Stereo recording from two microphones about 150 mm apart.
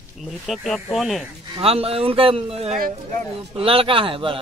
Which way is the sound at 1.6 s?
40° right (ahead or behind).